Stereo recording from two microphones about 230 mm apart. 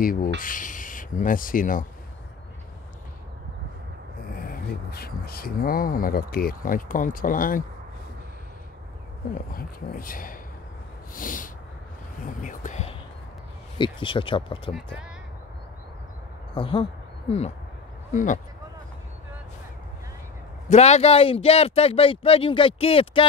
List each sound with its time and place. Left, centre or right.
0.0 s speech: left
4.4 s speech: left
9.3 s speech: left
13.7 s speech: left
16.5 s speech: left
18.1 s speech: left
20.7 s speech: left